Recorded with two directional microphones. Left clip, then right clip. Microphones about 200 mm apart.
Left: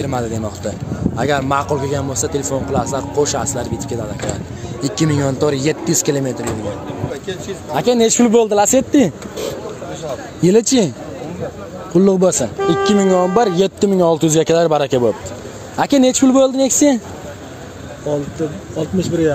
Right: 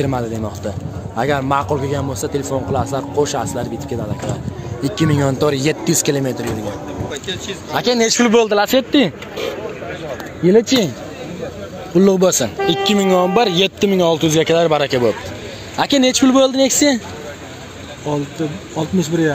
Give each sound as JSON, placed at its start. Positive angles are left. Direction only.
{"t": 0.0, "sound": "a man's voice", "side_deg": 0}
{"t": 4.8, "sound": "a man's voice", "side_deg": 0}
{"t": 7.7, "sound": "speech", "side_deg": 20}
{"t": 10.4, "sound": "speech", "side_deg": 45}
{"t": 12.0, "sound": "speech", "side_deg": 5}
{"t": 13.8, "sound": "speech", "side_deg": 30}
{"t": 14.1, "sound": "speech", "side_deg": 45}
{"t": 18.1, "sound": "speech", "side_deg": -35}